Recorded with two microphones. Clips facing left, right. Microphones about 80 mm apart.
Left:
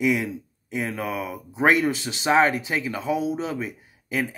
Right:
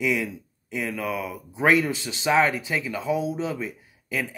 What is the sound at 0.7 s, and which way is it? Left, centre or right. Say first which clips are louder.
Speech: left 1 dB; left.